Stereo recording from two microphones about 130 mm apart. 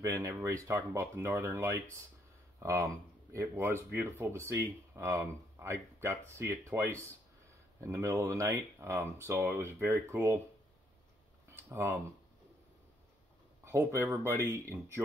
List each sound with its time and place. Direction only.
0.0 s speech: 25° right (ahead or behind)
11.4 s a sound: 20° right (ahead or behind)
13.7 s speech: 20° right (ahead or behind)